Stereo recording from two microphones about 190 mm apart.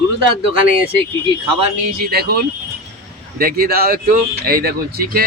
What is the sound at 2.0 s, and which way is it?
Speech, 55° right (ahead or behind).